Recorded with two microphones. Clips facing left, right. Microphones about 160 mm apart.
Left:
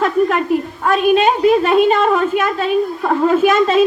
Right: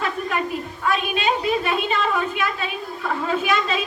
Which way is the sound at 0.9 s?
45° left (ahead or behind).